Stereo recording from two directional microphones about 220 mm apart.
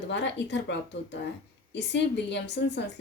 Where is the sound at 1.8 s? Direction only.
50° left (ahead or behind).